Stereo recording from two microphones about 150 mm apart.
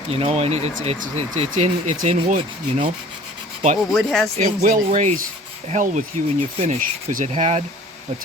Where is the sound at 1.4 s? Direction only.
55° right (ahead or behind).